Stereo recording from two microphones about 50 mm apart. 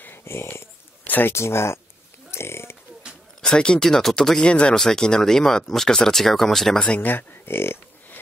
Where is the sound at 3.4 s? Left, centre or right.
Centre.